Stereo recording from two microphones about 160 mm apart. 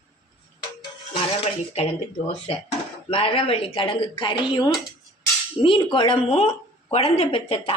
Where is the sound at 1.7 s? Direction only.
35° left (ahead or behind).